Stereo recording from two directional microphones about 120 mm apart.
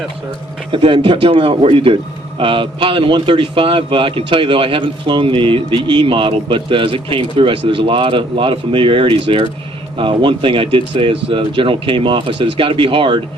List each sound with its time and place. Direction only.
0.7 s a man's voice: 45° right (ahead or behind)